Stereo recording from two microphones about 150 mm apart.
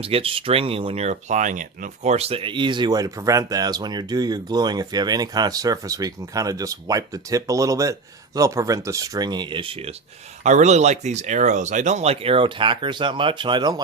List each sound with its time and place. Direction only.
0.0 s speech: 40° right (ahead or behind)
10.4 s speech: 50° right (ahead or behind); by 13.8 s 30° right (ahead or behind)